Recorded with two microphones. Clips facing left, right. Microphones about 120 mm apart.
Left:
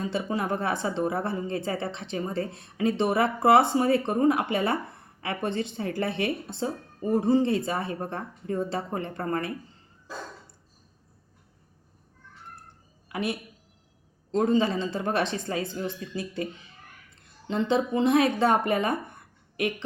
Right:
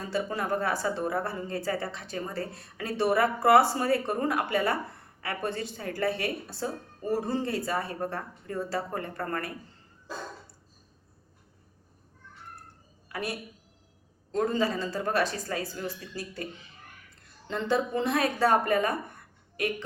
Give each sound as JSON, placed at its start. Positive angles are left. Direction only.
{"t": 0.1, "sound": "speech", "side_deg": 20}
{"t": 13.1, "sound": "a sound", "side_deg": 25}
{"t": 14.3, "sound": "speech", "side_deg": 25}
{"t": 17.5, "sound": "speech", "side_deg": 20}